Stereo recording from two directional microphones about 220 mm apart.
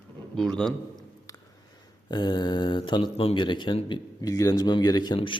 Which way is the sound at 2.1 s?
20° left (ahead or behind).